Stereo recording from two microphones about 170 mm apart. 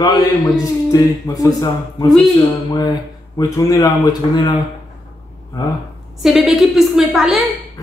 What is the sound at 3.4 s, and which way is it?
Speech, 20° left (ahead or behind).